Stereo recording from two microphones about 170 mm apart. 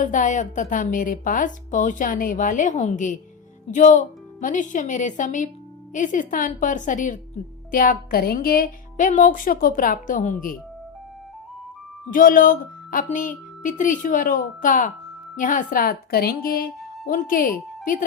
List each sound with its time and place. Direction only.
0.0 s a woman's voice: 50° left (ahead or behind)
12.1 s a woman's voice: 55° left (ahead or behind)